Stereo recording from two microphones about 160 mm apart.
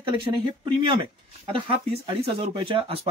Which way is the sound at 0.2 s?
30° right (ahead or behind).